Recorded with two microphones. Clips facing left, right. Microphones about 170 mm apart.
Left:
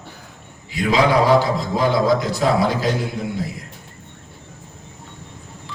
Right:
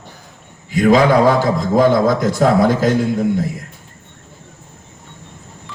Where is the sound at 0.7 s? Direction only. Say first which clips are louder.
Right 5 dB; 50° right (ahead or behind).